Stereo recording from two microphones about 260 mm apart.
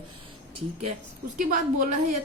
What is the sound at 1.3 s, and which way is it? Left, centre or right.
Speech, right.